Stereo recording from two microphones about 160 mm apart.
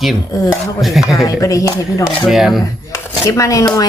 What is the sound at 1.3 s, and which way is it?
Speech, 20° left (ahead or behind).